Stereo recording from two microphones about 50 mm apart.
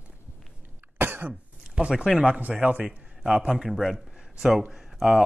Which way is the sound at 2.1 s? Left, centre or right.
Right.